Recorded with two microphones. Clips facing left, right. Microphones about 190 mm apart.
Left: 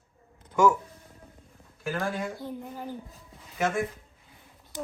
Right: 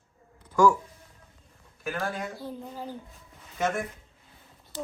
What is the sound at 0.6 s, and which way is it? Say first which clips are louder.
Speech: right 1 dB; 20° left (ahead or behind).